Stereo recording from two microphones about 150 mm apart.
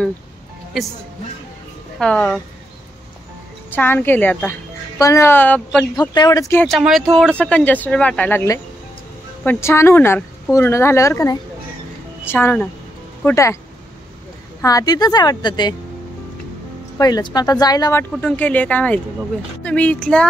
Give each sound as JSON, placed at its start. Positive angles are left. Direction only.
{"t": 0.7, "sound": "speech", "side_deg": 0}
{"t": 2.0, "sound": "speech", "side_deg": 5}
{"t": 3.7, "sound": "speech", "side_deg": 15}
{"t": 5.9, "sound": "a woman's voice", "side_deg": 25}
{"t": 6.8, "sound": "a woman's voice", "side_deg": 0}
{"t": 14.6, "sound": "a woman's voice", "side_deg": 20}
{"t": 17.0, "sound": "a woman's voice", "side_deg": 25}
{"t": 18.2, "sound": "speech", "side_deg": 10}